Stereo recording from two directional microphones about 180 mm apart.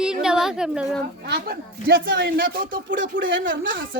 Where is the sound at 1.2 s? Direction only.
65° right (ahead or behind).